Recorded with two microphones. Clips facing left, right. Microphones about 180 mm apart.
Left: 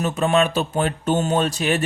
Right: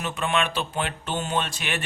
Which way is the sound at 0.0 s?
40° left (ahead or behind).